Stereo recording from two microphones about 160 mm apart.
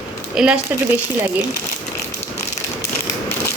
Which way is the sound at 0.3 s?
5° right (ahead or behind).